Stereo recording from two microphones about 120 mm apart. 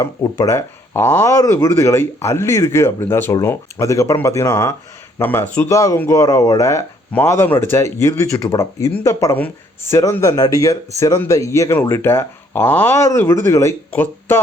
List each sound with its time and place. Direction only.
0.0 s speech: 30° left (ahead or behind)